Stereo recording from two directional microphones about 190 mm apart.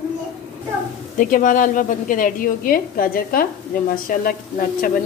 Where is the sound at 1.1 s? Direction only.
45° left (ahead or behind).